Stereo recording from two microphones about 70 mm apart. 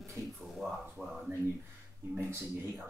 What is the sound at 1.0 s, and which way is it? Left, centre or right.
Speech, centre.